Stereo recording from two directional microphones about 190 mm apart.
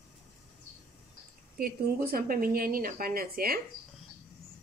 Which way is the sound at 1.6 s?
50° right (ahead or behind).